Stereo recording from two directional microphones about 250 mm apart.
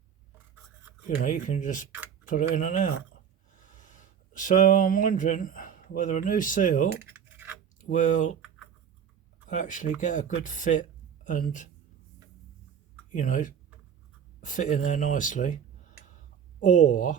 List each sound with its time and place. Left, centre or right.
1.2 s speech: left
7.0 s scratch: centre
7.8 s speech: left
9.5 s speech: left
13.1 s speech: left